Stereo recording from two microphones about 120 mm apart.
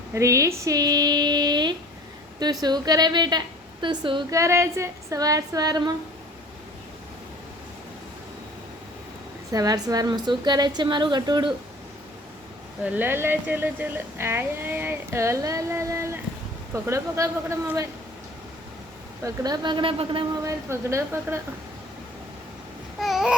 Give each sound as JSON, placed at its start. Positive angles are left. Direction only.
{"t": 0.1, "sound": "a woman's voice", "side_deg": -25}
{"t": 4.3, "sound": "a woman's voice", "side_deg": -25}
{"t": 9.5, "sound": "a woman's voice", "side_deg": -30}
{"t": 12.8, "sound": "a woman's voice", "side_deg": -15}
{"t": 19.2, "sound": "speech", "side_deg": -30}
{"t": 20.4, "sound": "a woman's voice", "side_deg": -25}
{"t": 23.0, "sound": "babbling", "side_deg": 0}